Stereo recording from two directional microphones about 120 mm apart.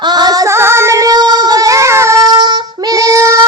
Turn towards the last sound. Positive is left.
turn(degrees=-25)  # may be behind; listen again after turning